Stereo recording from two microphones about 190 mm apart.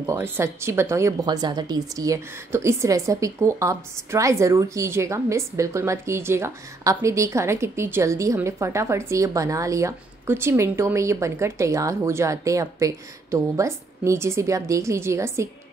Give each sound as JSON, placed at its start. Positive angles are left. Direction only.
{"t": 0.0, "sound": "a woman's voice", "side_deg": -15}